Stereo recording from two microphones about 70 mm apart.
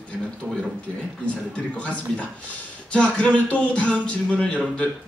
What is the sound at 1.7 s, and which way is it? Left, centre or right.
Speech, centre.